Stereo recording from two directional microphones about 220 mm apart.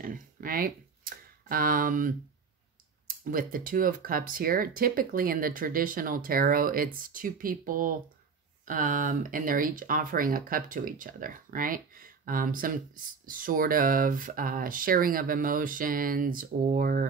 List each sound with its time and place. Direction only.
0.0 s speech: 40° right (ahead or behind)
3.3 s speech: 40° right (ahead or behind)